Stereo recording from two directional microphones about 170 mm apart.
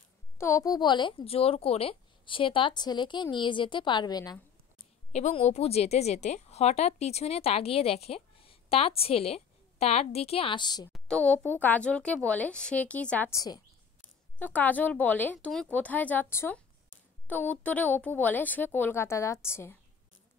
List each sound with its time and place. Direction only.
0.4 s speech: 15° left (ahead or behind)
5.1 s a woman's voice: 40° left (ahead or behind)
10.9 s speech: 5° left (ahead or behind)
14.4 s speech: 10° left (ahead or behind)